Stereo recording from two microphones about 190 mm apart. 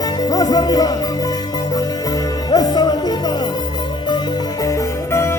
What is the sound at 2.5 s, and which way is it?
Music, 20° left (ahead or behind).